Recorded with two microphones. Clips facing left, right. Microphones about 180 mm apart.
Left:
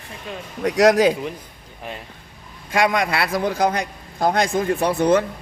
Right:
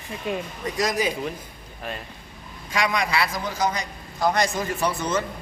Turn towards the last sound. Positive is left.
turn(degrees=60)  # may be behind; listen again after turning